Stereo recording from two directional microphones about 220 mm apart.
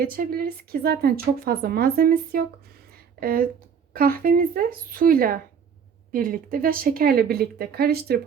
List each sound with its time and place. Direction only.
0.2 s a woman's voice: 40° right (ahead or behind)